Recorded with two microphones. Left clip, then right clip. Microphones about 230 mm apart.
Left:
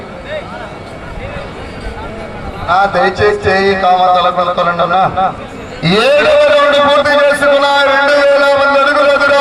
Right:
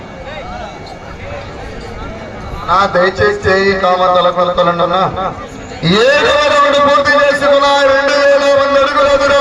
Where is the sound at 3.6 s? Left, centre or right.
Left.